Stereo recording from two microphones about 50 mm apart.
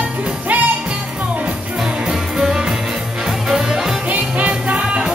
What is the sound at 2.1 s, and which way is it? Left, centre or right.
Music, centre.